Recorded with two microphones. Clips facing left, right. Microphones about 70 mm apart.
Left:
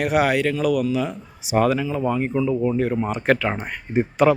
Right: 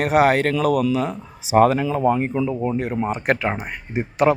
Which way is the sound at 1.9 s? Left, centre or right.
Right.